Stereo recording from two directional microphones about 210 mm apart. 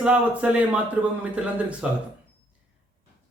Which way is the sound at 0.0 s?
5° right (ahead or behind).